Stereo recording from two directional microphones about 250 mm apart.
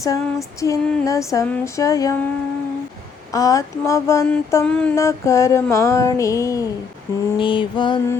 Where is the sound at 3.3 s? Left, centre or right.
Centre.